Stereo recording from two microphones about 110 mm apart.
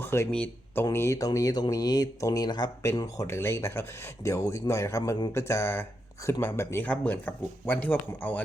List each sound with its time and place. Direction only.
0.0 s a sound: 20° left (ahead or behind)
0.3 s speech: 15° left (ahead or behind)
0.9 s speech: 30° left (ahead or behind)
3.0 s speech: 25° left (ahead or behind)